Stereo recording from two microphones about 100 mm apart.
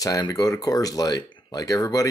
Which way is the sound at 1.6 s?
35° left (ahead or behind).